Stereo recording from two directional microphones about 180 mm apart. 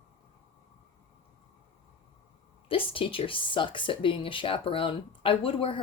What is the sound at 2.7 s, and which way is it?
Speech, 30° left (ahead or behind).